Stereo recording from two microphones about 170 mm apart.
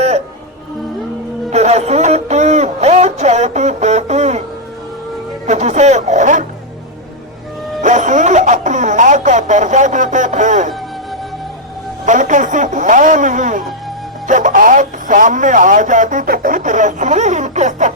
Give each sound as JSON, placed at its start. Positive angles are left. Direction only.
{"t": 1.5, "sound": "speech", "side_deg": -40}
{"t": 5.5, "sound": "speech", "side_deg": -45}
{"t": 7.8, "sound": "speech", "side_deg": -45}
{"t": 12.0, "sound": "speech", "side_deg": -45}